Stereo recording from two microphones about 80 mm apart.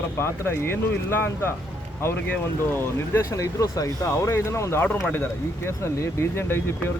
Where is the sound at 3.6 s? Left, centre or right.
Left.